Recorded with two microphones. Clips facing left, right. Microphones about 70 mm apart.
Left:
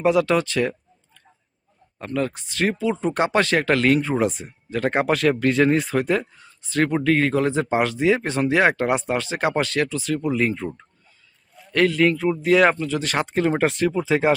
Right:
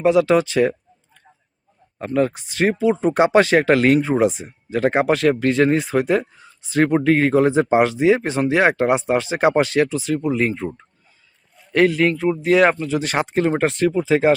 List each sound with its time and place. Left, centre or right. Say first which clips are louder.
0.0 s speech: right 3 dB; centre
13.0 s speech: right 2 dB; centre
13.2 s speech: right 2 dB; centre